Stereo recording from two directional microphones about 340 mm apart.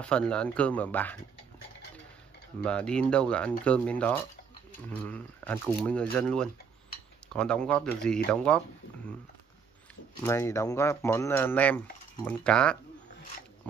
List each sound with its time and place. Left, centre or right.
0.0 s speech: centre
2.6 s speech: centre
10.2 s speech: centre